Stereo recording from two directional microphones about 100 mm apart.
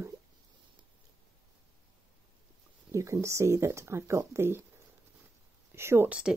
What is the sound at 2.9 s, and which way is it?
Speech, 30° right (ahead or behind).